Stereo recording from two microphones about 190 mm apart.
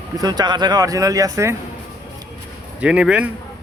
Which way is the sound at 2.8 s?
5° right (ahead or behind).